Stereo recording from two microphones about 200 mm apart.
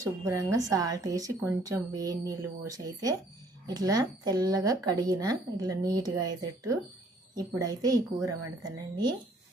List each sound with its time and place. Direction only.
0.0 s speech: 15° right (ahead or behind)